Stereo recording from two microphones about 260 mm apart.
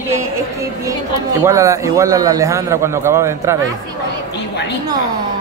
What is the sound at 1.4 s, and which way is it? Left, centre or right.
A man's voice, centre.